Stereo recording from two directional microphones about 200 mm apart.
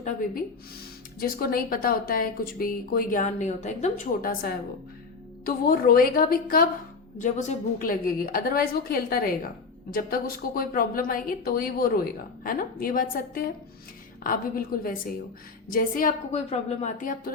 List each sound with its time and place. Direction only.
1.2 s speech: 50° left (ahead or behind)